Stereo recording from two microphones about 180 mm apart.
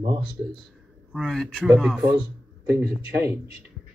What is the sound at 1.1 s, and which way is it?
Speech, centre (ahead or behind).